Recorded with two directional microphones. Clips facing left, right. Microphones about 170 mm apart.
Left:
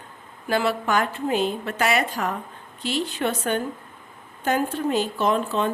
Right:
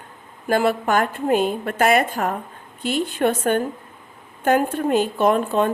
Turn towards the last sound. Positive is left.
turn(degrees=-55)  # may be behind; listen again after turning